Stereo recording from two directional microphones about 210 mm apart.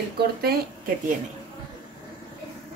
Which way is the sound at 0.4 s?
50° right (ahead or behind).